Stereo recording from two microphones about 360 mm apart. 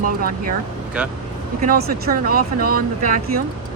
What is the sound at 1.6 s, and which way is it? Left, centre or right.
Speech, right.